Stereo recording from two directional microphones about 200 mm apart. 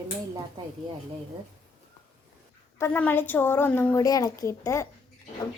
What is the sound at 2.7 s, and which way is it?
A woman's voice, 10° left (ahead or behind).